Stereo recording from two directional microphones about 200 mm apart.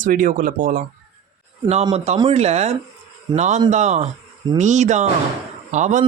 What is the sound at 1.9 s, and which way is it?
Speech, 30° right (ahead or behind).